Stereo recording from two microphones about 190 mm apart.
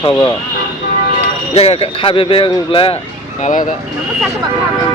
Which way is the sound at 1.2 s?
35° left (ahead or behind).